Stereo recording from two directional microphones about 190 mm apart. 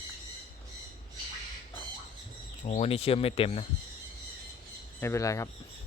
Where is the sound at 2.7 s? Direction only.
30° left (ahead or behind).